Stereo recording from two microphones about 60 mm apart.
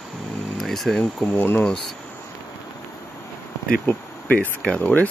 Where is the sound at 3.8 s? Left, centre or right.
Left.